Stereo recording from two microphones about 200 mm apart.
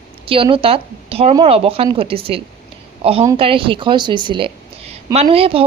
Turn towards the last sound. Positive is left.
turn(degrees=-30)  # may be behind; listen again after turning